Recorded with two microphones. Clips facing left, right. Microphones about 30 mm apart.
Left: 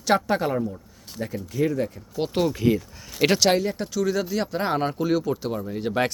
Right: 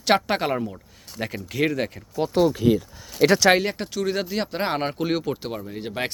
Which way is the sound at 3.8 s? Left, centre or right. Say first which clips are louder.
Left 1 dB; right.